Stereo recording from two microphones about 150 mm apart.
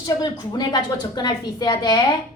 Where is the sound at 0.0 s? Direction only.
30° left (ahead or behind).